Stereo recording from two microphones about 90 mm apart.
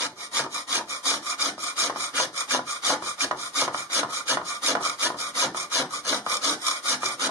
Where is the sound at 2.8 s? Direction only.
35° left (ahead or behind).